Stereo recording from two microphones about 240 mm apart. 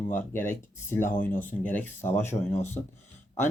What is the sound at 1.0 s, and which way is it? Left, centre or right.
Speech, left.